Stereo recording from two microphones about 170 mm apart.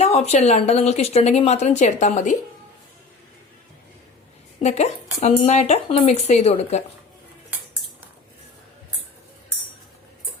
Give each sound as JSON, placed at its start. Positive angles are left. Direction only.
{"t": 0.0, "sound": "speech", "side_deg": 40}
{"t": 4.6, "sound": "speech", "side_deg": 40}